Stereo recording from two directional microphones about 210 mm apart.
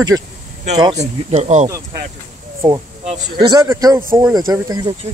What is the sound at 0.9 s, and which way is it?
Speech, 30° right (ahead or behind).